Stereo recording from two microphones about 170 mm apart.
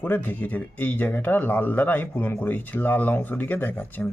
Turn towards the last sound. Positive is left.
turn(degrees=10)  # may be behind; listen again after turning